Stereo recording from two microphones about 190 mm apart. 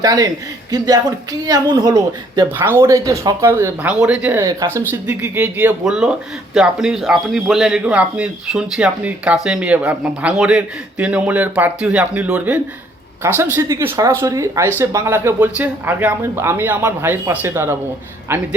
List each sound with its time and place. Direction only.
0.0 s a man's voice: 20° right (ahead or behind)